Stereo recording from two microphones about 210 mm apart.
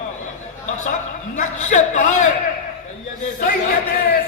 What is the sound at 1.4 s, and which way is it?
Speech, 35° left (ahead or behind).